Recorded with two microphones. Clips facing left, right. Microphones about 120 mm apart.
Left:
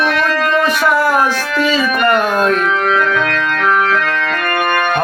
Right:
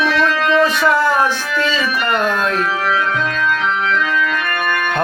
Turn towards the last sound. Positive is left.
turn(degrees=65)  # may be behind; listen again after turning